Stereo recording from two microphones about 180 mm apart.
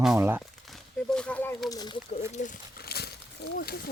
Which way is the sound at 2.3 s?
45° left (ahead or behind).